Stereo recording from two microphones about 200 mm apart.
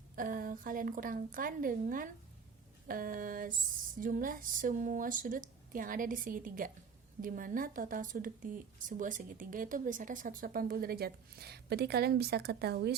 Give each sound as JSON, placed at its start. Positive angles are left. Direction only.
{"t": 0.2, "sound": "a woman's voice", "side_deg": -45}